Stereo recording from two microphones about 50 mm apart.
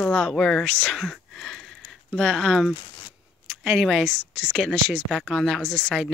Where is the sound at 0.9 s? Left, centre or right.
Centre.